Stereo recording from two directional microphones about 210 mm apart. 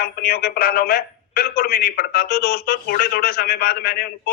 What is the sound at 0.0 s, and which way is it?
A man's voice, 45° left (ahead or behind).